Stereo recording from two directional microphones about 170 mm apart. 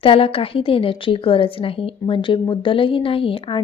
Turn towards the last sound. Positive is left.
turn(degrees=30)  # may be behind; listen again after turning